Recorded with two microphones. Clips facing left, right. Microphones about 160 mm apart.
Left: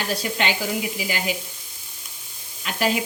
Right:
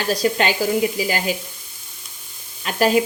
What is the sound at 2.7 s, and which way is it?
Sizzle, 45° right (ahead or behind).